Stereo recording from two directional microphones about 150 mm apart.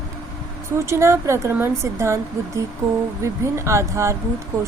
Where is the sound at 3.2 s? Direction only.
20° right (ahead or behind).